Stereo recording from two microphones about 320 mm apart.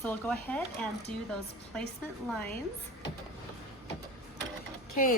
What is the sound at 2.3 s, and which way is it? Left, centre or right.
Speech, centre.